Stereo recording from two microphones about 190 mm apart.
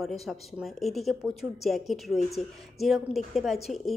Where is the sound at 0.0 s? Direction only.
Centre (ahead or behind).